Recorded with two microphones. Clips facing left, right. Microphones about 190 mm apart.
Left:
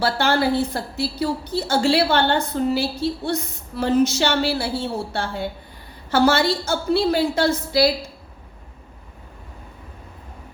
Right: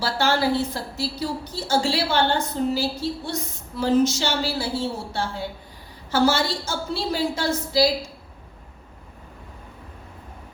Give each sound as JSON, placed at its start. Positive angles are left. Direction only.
{"t": 0.0, "sound": "a woman's voice", "side_deg": 60}